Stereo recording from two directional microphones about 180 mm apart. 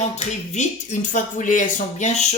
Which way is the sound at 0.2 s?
40° left (ahead or behind).